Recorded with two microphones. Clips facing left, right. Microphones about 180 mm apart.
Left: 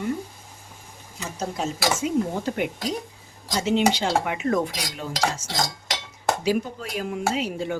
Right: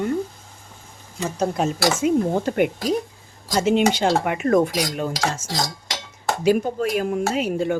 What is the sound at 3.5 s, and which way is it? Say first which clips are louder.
Cutlery: right 3 dB; 50° right (ahead or behind).